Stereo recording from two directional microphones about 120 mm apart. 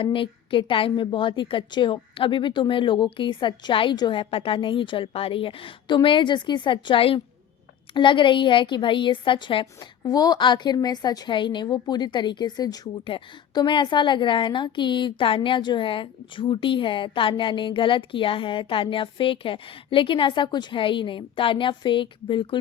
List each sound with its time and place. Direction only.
0.0 s a woman's voice: 45° left (ahead or behind)
10.0 s a woman's voice: 35° left (ahead or behind)